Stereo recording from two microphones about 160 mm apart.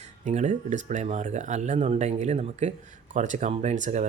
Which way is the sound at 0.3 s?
50° right (ahead or behind).